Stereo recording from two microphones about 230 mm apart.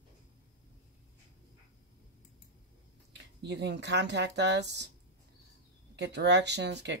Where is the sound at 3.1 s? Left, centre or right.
Right.